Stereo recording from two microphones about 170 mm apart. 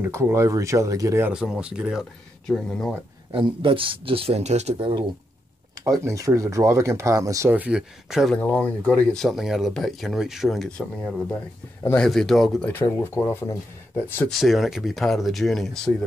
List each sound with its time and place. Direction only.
0.0 s speech: 15° right (ahead or behind)
1.3 s speech: 5° right (ahead or behind)
3.3 s speech: 30° right (ahead or behind)
5.9 s speech: 20° right (ahead or behind); by 12.8 s 5° left (ahead or behind)
12.8 s speech: 15° left (ahead or behind)
14.3 s speech: centre (ahead or behind)